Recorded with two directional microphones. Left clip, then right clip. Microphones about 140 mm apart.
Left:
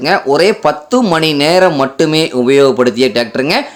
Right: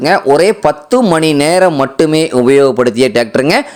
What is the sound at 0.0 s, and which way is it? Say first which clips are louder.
Speech: right 2 dB; 40° right (ahead or behind).